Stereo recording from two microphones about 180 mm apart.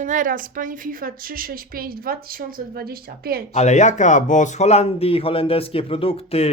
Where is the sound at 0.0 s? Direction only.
45° right (ahead or behind).